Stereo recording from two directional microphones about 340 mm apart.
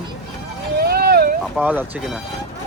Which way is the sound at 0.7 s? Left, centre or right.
Right.